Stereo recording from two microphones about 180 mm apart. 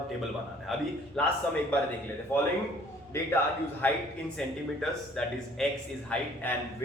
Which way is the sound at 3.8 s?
10° left (ahead or behind).